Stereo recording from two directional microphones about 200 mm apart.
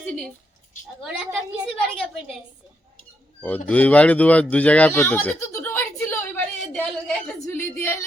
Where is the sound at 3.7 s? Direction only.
5° left (ahead or behind).